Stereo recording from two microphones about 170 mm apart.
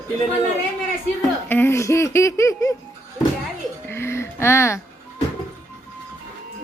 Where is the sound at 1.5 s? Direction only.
15° left (ahead or behind).